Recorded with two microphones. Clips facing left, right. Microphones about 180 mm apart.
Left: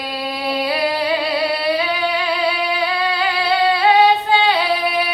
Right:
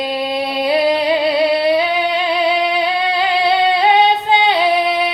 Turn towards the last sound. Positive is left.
turn(degrees=-25)  # may be behind; listen again after turning